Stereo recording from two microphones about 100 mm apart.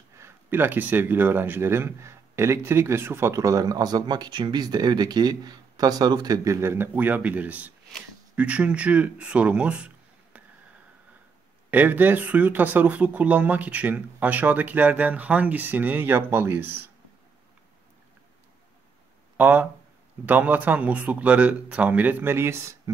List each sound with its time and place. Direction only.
0.2 s speech: 20° right (ahead or behind)
11.7 s speech: 15° right (ahead or behind)
19.3 s speech: 15° right (ahead or behind)